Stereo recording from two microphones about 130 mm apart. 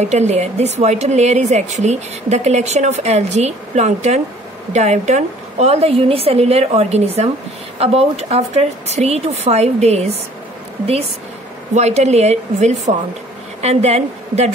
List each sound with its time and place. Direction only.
0.0 s a woman's voice: 60° right (ahead or behind)
11.7 s a woman's voice: 60° right (ahead or behind)